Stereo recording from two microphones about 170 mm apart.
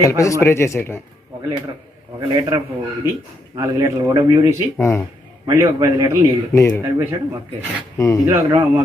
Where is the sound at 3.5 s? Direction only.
20° right (ahead or behind).